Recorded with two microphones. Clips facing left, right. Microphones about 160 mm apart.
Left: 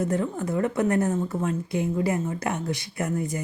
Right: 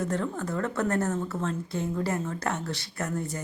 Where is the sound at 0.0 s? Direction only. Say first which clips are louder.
Left 4 dB; 10° left (ahead or behind).